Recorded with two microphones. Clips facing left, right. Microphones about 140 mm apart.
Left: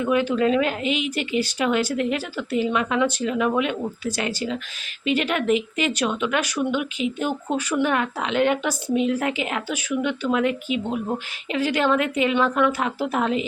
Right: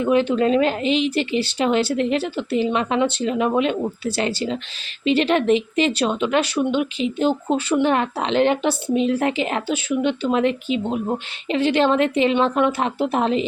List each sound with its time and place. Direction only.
0.0 s a woman's voice: 30° right (ahead or behind)